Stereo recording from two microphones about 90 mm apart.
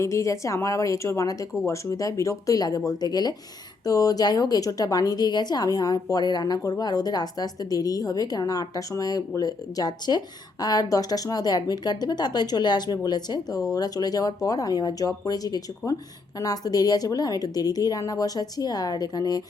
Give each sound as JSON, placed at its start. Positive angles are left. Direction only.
{"t": 0.0, "sound": "a woman's voice", "side_deg": 35}